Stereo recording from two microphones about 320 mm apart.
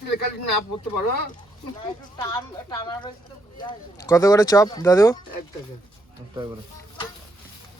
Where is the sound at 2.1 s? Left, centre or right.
Centre.